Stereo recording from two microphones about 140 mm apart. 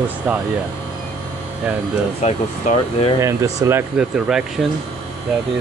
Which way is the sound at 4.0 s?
5° right (ahead or behind).